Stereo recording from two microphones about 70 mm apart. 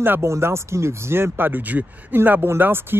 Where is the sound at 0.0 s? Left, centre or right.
Right.